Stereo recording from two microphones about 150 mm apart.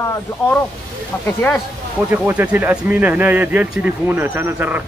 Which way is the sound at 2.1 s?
10° right (ahead or behind).